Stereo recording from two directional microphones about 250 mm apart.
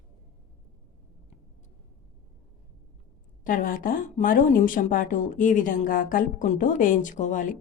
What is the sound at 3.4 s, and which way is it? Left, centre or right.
A woman's voice, left.